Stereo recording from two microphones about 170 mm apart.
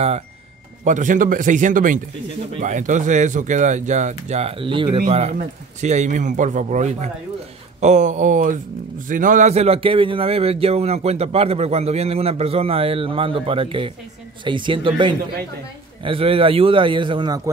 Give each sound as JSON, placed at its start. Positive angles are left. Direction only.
{"t": 0.8, "sound": "speech", "side_deg": -50}
{"t": 5.3, "sound": "a man's voice", "side_deg": -45}